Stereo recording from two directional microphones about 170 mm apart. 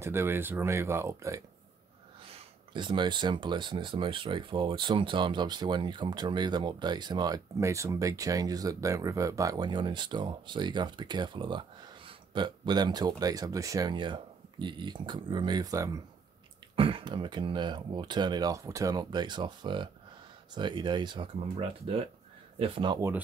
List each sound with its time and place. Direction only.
0.0 s speech: 15° right (ahead or behind)
2.3 s speech: 30° right (ahead or behind)
16.7 s speech: 30° right (ahead or behind)
22.9 s speech: 15° right (ahead or behind)